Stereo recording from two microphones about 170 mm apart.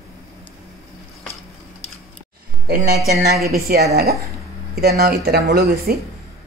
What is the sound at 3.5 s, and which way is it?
Speech, 65° right (ahead or behind).